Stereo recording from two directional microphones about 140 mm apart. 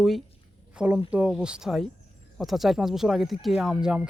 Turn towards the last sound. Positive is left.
turn(degrees=-10)  # may be behind; listen again after turning